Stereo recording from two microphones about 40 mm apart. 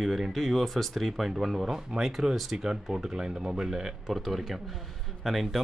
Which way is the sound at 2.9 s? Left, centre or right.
Centre.